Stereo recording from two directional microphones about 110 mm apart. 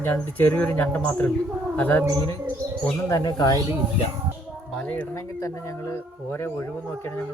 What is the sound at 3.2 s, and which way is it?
Speech, 40° left (ahead or behind).